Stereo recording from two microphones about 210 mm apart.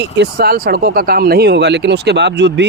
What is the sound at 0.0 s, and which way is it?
Speech, 50° right (ahead or behind).